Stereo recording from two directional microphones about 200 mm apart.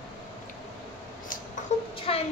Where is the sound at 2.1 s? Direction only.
30° left (ahead or behind).